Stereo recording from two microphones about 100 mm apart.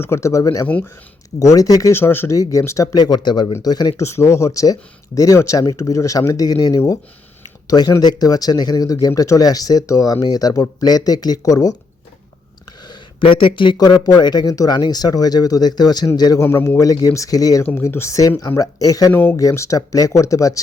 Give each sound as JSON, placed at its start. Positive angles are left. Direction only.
{"t": 0.0, "sound": "speech", "side_deg": 25}
{"t": 1.9, "sound": "speech", "side_deg": 25}
{"t": 3.9, "sound": "speech", "side_deg": 30}
{"t": 12.8, "sound": "speech", "side_deg": 55}
{"t": 16.4, "sound": "speech", "side_deg": 25}
{"t": 16.9, "sound": "speech", "side_deg": 40}
{"t": 17.8, "sound": "speech", "side_deg": 25}
{"t": 19.1, "sound": "speech", "side_deg": 20}
{"t": 19.4, "sound": "speech", "side_deg": 35}